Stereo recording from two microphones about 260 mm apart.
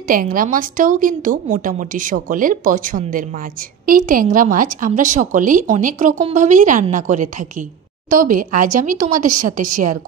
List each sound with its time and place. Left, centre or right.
0.1 s a woman's voice: right